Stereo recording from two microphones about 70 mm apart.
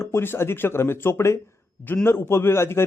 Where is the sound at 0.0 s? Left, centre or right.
Left.